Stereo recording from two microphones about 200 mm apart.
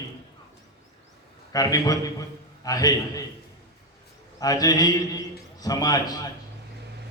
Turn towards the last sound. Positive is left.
turn(degrees=20)  # may be behind; listen again after turning